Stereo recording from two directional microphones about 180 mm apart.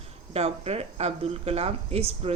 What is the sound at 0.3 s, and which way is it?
Speech, 35° right (ahead or behind).